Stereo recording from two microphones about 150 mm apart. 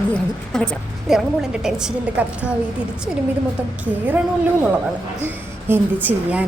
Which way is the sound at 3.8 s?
10° right (ahead or behind).